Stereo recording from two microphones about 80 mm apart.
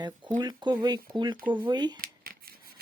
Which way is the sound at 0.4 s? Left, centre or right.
Right.